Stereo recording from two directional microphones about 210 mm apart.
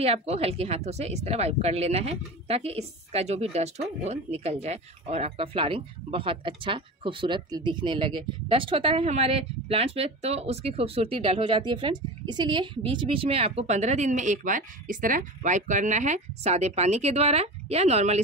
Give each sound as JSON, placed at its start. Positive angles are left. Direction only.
{"t": 0.0, "sound": "speech", "side_deg": -30}